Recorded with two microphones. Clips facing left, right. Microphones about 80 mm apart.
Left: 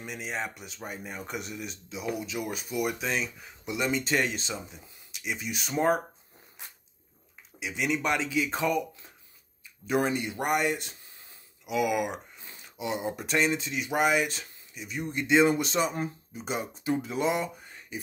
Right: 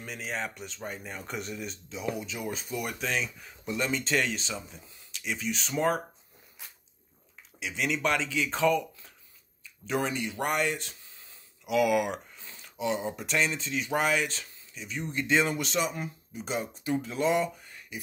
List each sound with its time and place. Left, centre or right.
0.0 s speech: centre
7.6 s speech: centre
11.6 s speech: centre
12.4 s a sound: centre
13.5 s speech: centre
15.5 s speech: left